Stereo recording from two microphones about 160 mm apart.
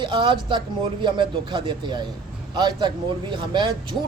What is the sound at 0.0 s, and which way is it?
Speech, 30° right (ahead or behind).